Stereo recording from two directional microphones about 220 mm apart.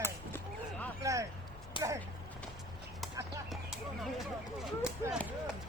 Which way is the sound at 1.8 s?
20° left (ahead or behind).